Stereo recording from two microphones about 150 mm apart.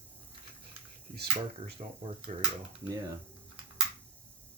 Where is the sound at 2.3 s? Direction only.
50° right (ahead or behind).